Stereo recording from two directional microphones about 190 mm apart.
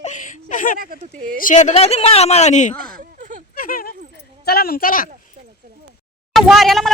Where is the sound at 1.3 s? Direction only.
45° left (ahead or behind).